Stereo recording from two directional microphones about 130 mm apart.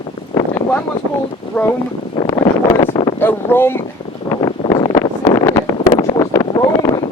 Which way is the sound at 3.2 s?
15° left (ahead or behind).